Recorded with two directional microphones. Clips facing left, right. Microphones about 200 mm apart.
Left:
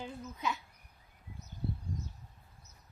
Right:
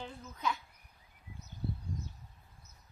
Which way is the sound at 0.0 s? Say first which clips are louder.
Even; 10° left (ahead or behind).